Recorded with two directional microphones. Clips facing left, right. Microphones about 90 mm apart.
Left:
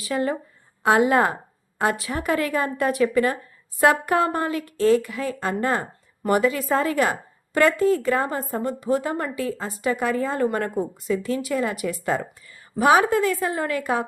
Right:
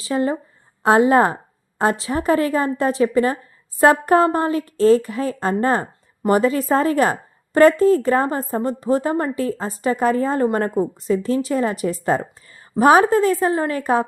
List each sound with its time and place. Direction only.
0.0 s a woman's voice: 30° right (ahead or behind)